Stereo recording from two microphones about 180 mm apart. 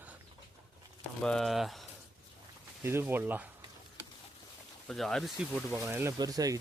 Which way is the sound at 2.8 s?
10° right (ahead or behind).